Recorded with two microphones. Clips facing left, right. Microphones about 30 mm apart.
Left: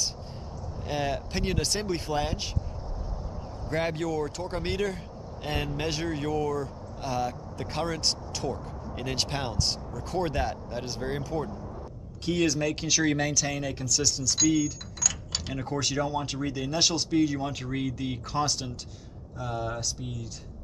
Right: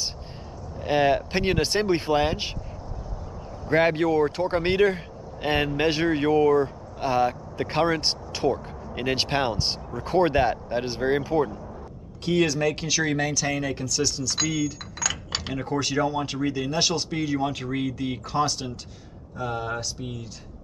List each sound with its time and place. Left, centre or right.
0.7 s speech: right
3.6 s speech: right
12.3 s speech: centre
15.0 s keys jangling: right
15.6 s speech: centre
19.3 s speech: centre